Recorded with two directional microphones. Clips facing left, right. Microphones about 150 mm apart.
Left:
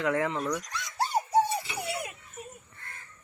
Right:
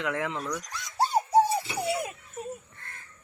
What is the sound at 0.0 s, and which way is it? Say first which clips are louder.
Speech: left 3 dB; centre (ahead or behind).